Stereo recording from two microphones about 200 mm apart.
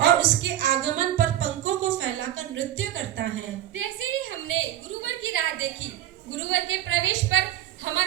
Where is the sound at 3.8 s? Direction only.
90° right.